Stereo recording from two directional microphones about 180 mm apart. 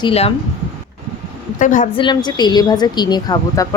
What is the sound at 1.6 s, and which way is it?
Speech, 45° left (ahead or behind).